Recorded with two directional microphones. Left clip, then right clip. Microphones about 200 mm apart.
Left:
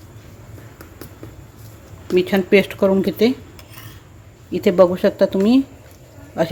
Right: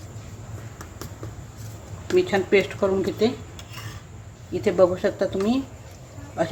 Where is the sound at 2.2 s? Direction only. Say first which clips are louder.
Left 4 dB; 45° left (ahead or behind).